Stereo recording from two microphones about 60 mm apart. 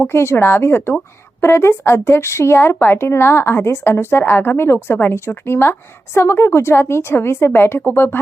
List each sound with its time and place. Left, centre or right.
0.1 s speech: left